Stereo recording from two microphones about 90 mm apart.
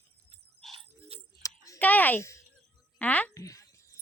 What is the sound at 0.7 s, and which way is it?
Music, 90° right.